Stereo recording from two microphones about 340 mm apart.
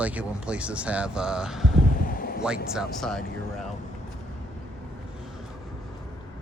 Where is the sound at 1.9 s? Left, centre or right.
Left.